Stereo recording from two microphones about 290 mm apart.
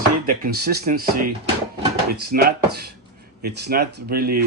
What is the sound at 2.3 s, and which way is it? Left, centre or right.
Speech, right.